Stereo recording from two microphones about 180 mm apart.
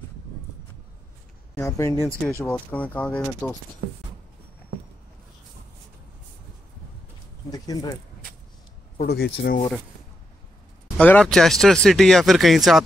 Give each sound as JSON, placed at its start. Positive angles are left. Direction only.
{"t": 1.6, "sound": "speech", "side_deg": 15}
{"t": 7.5, "sound": "speech", "side_deg": 20}
{"t": 8.9, "sound": "speech", "side_deg": 60}
{"t": 11.0, "sound": "speech", "side_deg": 5}